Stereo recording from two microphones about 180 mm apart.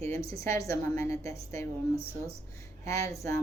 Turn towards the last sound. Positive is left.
turn(degrees=15)  # may be behind; listen again after turning